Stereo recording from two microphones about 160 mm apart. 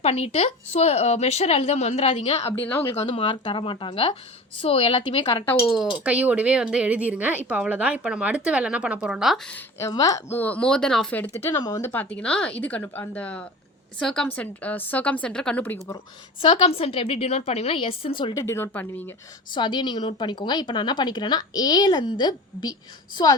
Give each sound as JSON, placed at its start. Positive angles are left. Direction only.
{"t": 0.0, "sound": "speech", "side_deg": 40}
{"t": 2.6, "sound": "speech", "side_deg": 15}
{"t": 2.9, "sound": "speech", "side_deg": 40}
{"t": 5.6, "sound": "a woman's voice", "side_deg": 0}
{"t": 9.5, "sound": "speech", "side_deg": 15}
{"t": 11.5, "sound": "speech", "side_deg": 25}
{"t": 16.4, "sound": "speech", "side_deg": 35}
{"t": 18.4, "sound": "speech", "side_deg": 15}
{"t": 19.5, "sound": "a woman's voice", "side_deg": 30}